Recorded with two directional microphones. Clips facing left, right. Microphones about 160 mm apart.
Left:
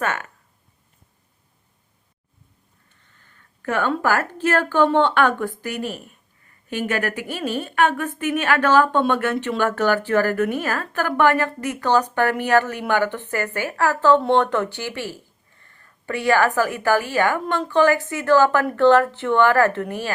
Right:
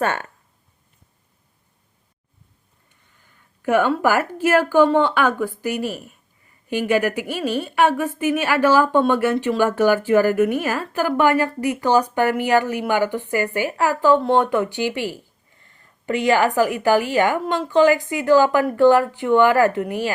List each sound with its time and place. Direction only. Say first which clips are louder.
0.0 s speech: right 3 dB; 30° right (ahead or behind)
2.9 s a woman's voice: right 1 dB; 10° right (ahead or behind)
14.2 s speech: even; centre (ahead or behind)
14.4 s a woman's voice: right 3 dB; 10° right (ahead or behind)